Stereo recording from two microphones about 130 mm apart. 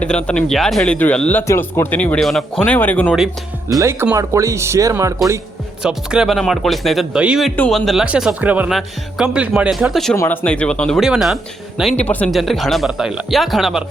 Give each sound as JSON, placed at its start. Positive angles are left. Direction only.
{"t": 0.0, "sound": "speech", "side_deg": 10}
{"t": 4.1, "sound": "speech", "side_deg": -25}
{"t": 5.8, "sound": "speech", "side_deg": -5}
{"t": 8.0, "sound": "speech", "side_deg": -10}
{"t": 10.2, "sound": "speech", "side_deg": 15}